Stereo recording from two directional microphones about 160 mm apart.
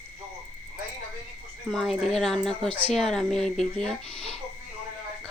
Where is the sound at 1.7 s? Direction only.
Centre (ahead or behind).